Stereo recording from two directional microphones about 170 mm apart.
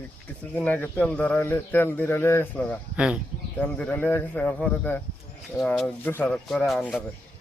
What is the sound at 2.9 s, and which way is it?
Speech, 5° right (ahead or behind).